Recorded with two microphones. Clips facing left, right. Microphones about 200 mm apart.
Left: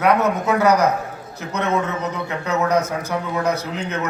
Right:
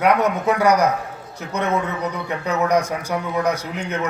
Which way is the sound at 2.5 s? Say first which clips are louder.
Even; 15° right (ahead or behind).